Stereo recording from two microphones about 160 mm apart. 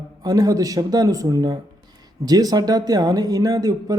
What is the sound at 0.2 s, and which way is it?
A man's voice, 25° right (ahead or behind).